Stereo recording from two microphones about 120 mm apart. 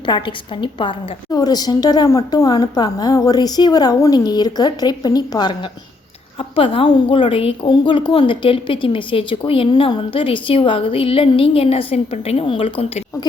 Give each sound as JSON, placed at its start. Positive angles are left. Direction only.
{"t": 0.0, "sound": "a woman's voice", "side_deg": 40}
{"t": 6.6, "sound": "a woman's voice", "side_deg": 45}